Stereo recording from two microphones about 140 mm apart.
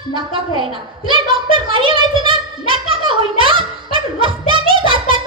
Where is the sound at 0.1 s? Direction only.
35° right (ahead or behind).